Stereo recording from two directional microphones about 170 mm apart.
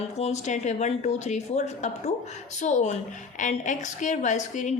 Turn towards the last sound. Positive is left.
turn(degrees=45)  # may be behind; listen again after turning